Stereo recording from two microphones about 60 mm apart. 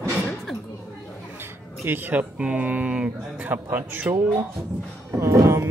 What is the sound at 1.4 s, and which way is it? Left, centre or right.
Speech, right.